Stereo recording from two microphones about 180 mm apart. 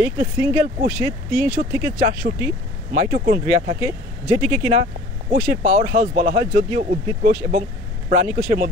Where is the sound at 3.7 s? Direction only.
15° right (ahead or behind).